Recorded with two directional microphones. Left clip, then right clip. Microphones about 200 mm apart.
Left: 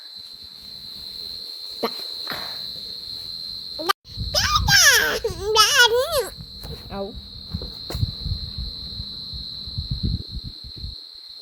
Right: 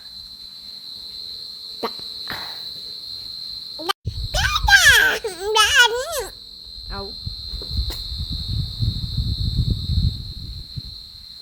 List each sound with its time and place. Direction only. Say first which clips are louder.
1.8 s insect: left 1 dB; 5° right (ahead or behind)
3.9 s a sound: left 2 dB; 5° right (ahead or behind)
4.3 s babbling: right 3 dB; 20° right (ahead or behind)